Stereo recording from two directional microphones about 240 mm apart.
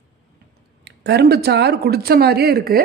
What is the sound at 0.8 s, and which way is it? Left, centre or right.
Speech, right.